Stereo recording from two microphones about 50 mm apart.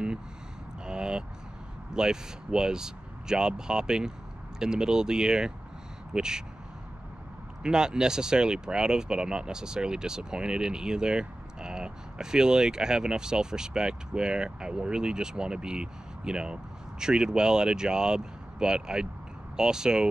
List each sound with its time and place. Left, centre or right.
0.8 s vehicle: centre
2.0 s speech: centre
7.6 s speech: centre